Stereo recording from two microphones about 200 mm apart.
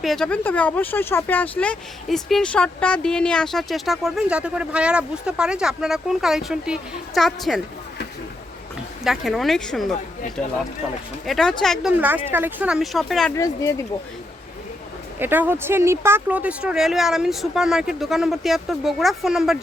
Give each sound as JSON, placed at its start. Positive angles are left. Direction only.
{"t": 0.0, "sound": "speech", "side_deg": 0}
{"t": 9.0, "sound": "speech", "side_deg": 0}
{"t": 11.3, "sound": "speech", "side_deg": 0}
{"t": 13.3, "sound": "speech", "side_deg": 15}
{"t": 15.2, "sound": "speech", "side_deg": -10}